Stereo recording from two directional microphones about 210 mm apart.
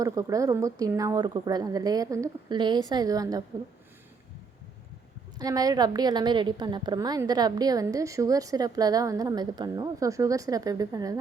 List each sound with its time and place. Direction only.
0.0 s a woman's voice: 15° right (ahead or behind)
5.4 s a woman's voice: 15° right (ahead or behind)